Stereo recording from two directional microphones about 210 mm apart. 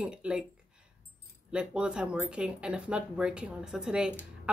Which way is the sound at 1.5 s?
5° right (ahead or behind).